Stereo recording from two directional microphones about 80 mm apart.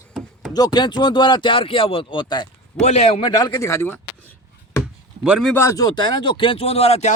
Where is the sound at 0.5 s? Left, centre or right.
Left.